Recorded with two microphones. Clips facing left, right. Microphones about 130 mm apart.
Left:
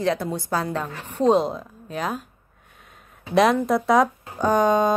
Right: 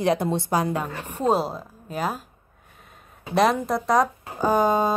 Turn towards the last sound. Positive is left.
turn(degrees=-5)  # may be behind; listen again after turning